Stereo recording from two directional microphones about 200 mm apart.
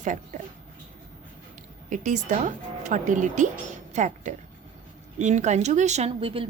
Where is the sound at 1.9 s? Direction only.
40° right (ahead or behind).